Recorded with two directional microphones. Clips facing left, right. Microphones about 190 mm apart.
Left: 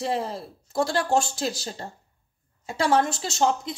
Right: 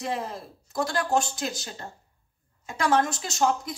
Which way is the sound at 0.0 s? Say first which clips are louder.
Left 4 dB; 30° left (ahead or behind).